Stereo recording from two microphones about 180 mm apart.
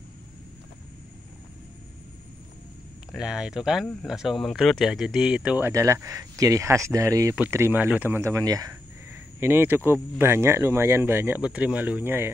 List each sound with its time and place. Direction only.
3.1 s speech: 5° right (ahead or behind)
5.7 s speech: 15° right (ahead or behind)